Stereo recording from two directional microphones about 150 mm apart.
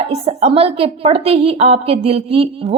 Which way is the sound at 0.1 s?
45° right (ahead or behind).